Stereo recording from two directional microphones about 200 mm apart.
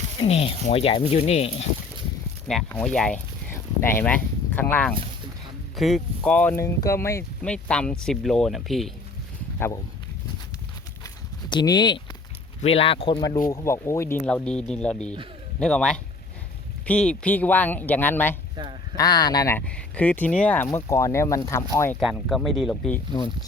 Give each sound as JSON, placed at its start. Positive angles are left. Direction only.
{"t": 0.2, "sound": "speech", "side_deg": 30}
{"t": 2.5, "sound": "speech", "side_deg": 0}
{"t": 11.0, "sound": "a sound", "side_deg": 20}
{"t": 12.6, "sound": "speech", "side_deg": 30}
{"t": 22.0, "sound": "speech", "side_deg": 0}